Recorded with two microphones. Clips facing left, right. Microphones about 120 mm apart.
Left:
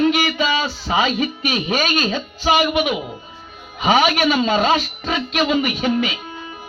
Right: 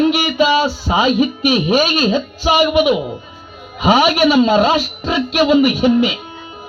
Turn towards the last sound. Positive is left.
turn(degrees=-10)  # may be behind; listen again after turning